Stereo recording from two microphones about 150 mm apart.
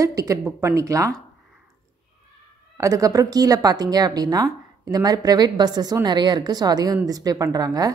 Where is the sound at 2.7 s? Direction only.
20° right (ahead or behind).